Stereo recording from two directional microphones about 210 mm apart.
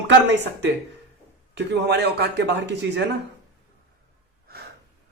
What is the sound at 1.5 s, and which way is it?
A man's voice, 50° right (ahead or behind).